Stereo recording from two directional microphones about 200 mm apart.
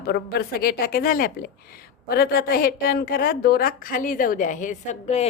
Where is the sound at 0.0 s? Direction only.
50° left (ahead or behind).